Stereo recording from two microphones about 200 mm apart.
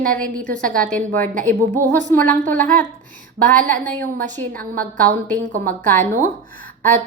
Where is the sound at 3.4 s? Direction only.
40° right (ahead or behind).